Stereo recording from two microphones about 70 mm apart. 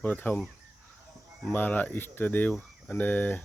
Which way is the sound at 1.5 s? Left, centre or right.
Left.